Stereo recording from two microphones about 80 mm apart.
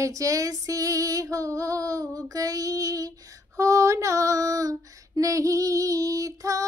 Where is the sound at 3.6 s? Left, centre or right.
Right.